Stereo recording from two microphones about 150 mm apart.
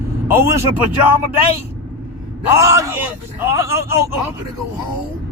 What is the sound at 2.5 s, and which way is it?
Speech, 20° right (ahead or behind).